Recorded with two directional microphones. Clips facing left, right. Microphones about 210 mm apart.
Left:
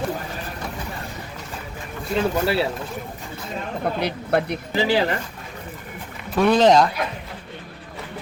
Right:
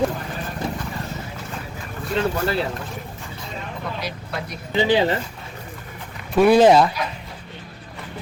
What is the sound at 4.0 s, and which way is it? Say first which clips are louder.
Speech: left 8 dB; 60° left (ahead or behind).